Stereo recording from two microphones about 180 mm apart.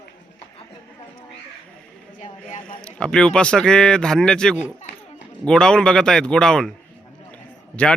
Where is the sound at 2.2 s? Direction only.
40° left (ahead or behind).